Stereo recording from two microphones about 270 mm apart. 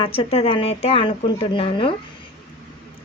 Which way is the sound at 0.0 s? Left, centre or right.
Left.